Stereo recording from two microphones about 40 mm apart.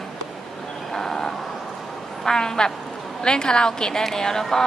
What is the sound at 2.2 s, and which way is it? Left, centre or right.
A woman's voice, centre.